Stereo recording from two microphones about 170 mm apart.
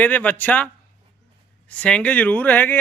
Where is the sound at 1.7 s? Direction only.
5° left (ahead or behind).